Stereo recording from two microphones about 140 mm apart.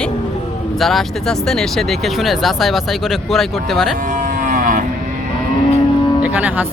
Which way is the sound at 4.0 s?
70° right (ahead or behind).